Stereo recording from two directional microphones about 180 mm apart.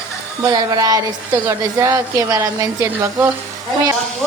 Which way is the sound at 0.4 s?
20° right (ahead or behind).